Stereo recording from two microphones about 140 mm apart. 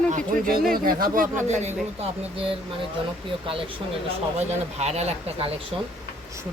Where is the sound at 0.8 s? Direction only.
85° right.